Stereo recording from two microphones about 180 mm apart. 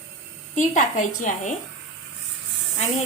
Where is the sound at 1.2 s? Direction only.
45° left (ahead or behind).